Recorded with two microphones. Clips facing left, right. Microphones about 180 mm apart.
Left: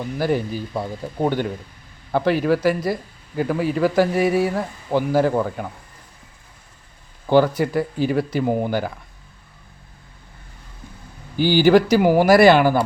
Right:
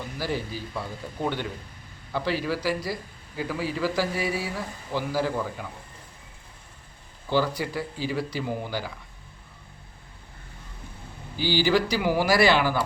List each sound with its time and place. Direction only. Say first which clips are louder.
0.2 s speech: left 9 dB; 55° left (ahead or behind)
2.1 s speech: left 9 dB; 55° left (ahead or behind)
7.3 s speech: left 9 dB; 55° left (ahead or behind)
11.3 s speech: left 9 dB; 55° left (ahead or behind)